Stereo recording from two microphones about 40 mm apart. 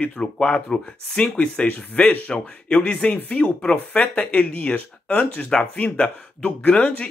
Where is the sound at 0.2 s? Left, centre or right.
Centre.